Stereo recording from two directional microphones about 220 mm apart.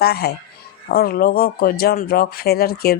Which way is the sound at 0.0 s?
45° left (ahead or behind).